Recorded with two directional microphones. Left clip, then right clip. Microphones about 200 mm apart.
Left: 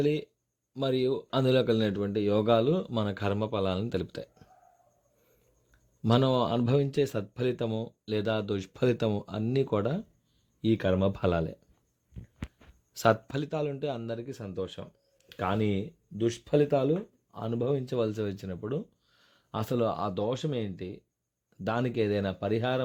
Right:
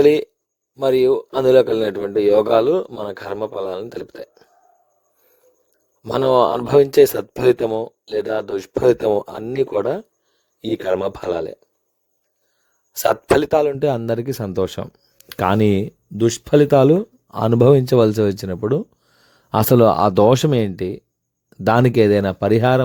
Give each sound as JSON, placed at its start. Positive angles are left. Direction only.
{"t": 0.0, "sound": "a man's voice", "side_deg": -50}
{"t": 6.0, "sound": "a man's voice", "side_deg": -50}
{"t": 12.9, "sound": "speech", "side_deg": -50}